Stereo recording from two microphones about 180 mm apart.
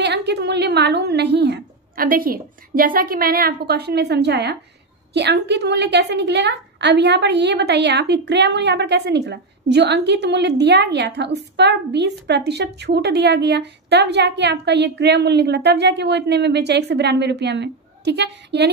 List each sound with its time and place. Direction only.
0.0 s a woman's voice: 70° right (ahead or behind)